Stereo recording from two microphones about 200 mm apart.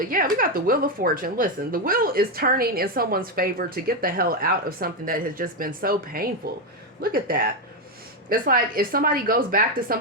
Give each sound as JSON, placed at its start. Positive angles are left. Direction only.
{"t": 0.0, "sound": "speech", "side_deg": -45}